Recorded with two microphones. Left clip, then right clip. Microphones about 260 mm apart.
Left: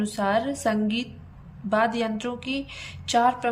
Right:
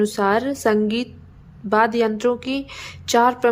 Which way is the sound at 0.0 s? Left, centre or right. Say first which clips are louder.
Right 6 dB; centre.